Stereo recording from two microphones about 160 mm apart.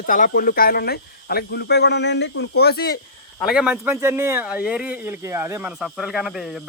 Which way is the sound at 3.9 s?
20° right (ahead or behind).